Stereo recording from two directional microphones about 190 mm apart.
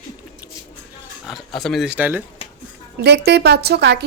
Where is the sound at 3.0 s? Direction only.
60° right (ahead or behind).